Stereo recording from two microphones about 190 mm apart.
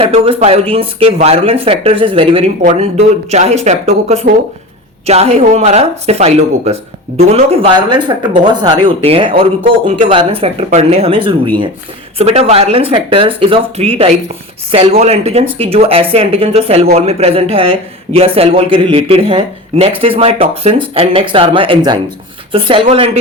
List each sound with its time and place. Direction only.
0.0 s speech: 30° right (ahead or behind)